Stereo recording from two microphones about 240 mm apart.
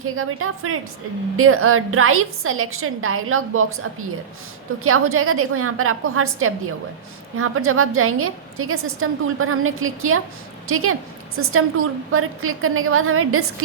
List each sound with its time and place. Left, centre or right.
0.0 s a woman's voice: right
4.8 s a woman's voice: right